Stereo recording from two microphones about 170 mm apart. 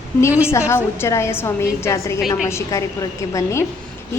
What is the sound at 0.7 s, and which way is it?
A woman's voice, 15° left (ahead or behind).